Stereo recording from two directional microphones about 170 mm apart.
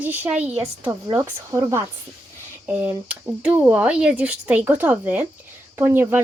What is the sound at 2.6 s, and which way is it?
Speech, 10° right (ahead or behind).